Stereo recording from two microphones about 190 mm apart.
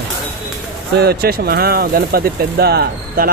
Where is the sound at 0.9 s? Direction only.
55° right (ahead or behind).